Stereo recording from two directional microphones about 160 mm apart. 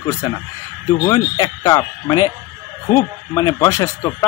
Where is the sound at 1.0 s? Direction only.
25° left (ahead or behind).